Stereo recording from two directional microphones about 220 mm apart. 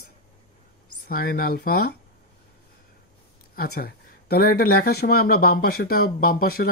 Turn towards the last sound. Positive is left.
turn(degrees=40)  # may be behind; listen again after turning